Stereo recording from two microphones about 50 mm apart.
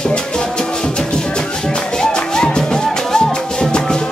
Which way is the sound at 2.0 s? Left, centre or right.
Centre.